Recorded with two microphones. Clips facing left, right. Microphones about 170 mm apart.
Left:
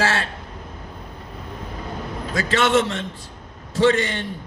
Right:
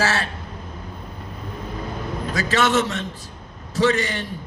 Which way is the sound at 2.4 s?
25° left (ahead or behind).